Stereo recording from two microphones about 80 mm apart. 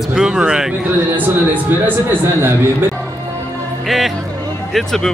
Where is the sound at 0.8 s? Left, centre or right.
Right.